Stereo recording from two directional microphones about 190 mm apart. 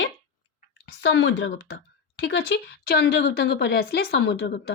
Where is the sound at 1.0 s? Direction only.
80° left.